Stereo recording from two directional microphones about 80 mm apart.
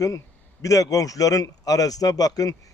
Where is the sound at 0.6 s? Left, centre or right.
Left.